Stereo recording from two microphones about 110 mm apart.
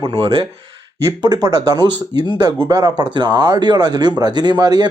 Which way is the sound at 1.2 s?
35° right (ahead or behind).